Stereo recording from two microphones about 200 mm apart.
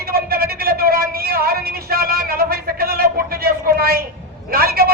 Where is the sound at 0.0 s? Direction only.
50° right (ahead or behind).